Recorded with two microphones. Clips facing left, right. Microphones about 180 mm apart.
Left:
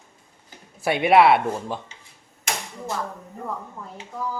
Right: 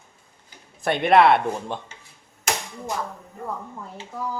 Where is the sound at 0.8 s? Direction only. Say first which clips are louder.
Even; 5° left (ahead or behind).